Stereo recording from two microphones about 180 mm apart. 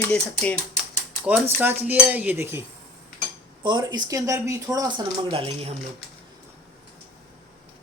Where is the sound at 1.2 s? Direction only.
10° right (ahead or behind).